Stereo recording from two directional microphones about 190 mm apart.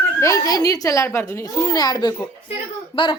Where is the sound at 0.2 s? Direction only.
15° left (ahead or behind).